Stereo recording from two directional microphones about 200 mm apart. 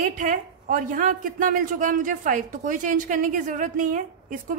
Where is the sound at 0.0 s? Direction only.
40° right (ahead or behind).